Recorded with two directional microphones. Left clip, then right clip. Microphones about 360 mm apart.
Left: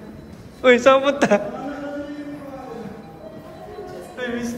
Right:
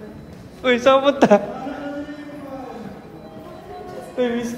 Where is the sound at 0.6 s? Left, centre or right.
Centre.